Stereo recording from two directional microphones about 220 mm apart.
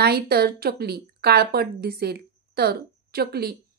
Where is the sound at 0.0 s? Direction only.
45° right (ahead or behind).